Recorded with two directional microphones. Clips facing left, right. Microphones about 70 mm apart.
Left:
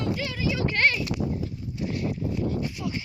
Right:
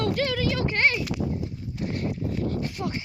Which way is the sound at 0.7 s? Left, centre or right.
Right.